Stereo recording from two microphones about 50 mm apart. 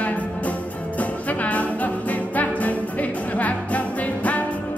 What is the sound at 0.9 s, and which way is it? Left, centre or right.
Music, left.